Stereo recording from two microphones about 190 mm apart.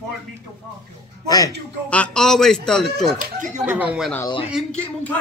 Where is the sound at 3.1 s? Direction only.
45° right (ahead or behind).